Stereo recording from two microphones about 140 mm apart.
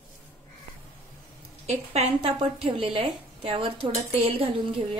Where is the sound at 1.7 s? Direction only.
50° right (ahead or behind).